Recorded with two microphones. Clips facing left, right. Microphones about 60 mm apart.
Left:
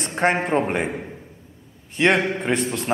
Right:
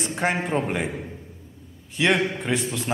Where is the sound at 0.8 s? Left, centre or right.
Left.